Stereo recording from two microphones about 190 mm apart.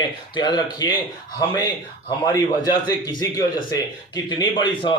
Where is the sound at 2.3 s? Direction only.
20° left (ahead or behind).